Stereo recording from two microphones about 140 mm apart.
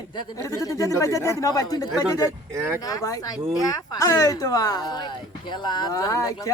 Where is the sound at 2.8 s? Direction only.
25° left (ahead or behind).